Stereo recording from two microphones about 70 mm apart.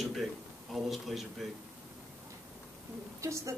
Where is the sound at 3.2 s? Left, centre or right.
Right.